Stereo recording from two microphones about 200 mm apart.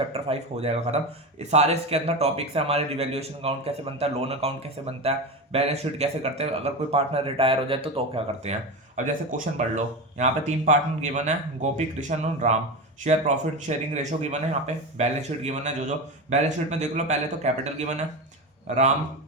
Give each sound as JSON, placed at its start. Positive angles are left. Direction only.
{"t": 0.1, "sound": "speech", "side_deg": -30}
{"t": 9.0, "sound": "speech", "side_deg": -40}